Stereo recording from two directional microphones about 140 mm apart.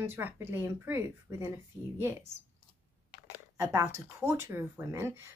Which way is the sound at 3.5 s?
20° right (ahead or behind).